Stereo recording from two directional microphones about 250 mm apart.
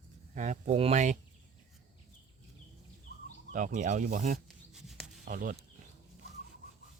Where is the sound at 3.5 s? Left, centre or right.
Right.